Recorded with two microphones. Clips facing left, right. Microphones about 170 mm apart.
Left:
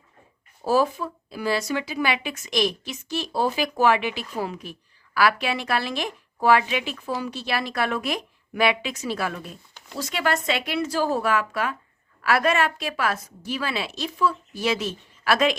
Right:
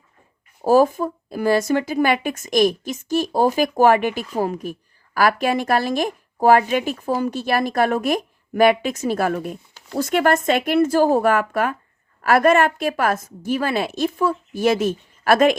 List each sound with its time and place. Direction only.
0.6 s speech: 45° right (ahead or behind)